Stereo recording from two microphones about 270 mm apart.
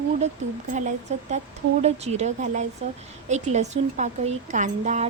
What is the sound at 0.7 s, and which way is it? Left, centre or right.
A woman's voice, right.